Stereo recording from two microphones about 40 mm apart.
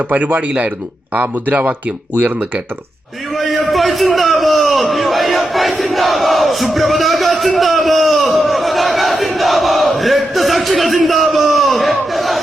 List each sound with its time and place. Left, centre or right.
0.1 s a man's voice: right
1.1 s speech: right
3.3 s a sound: centre
5.8 s battle cry: centre